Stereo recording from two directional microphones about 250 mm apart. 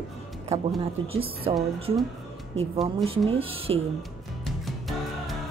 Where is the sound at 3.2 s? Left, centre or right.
Right.